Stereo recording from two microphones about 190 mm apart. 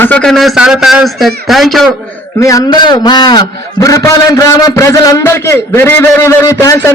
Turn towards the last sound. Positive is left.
turn(degrees=15)  # may be behind; listen again after turning